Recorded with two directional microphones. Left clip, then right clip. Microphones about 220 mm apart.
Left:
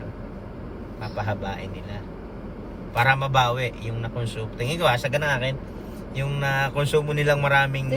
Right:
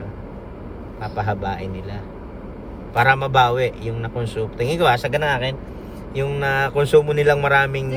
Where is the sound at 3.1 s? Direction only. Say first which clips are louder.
Right 5 dB; 25° right (ahead or behind).